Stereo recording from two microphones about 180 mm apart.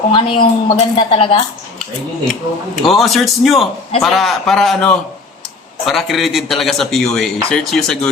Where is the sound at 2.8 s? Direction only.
Centre (ahead or behind).